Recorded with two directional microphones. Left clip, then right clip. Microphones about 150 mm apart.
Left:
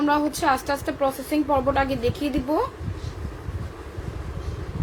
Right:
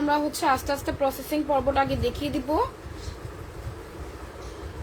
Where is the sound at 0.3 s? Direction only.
10° left (ahead or behind).